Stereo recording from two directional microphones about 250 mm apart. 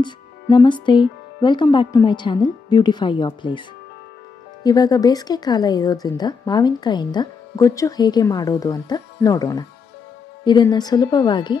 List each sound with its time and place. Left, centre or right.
0.0 s speech: centre
4.6 s speech: centre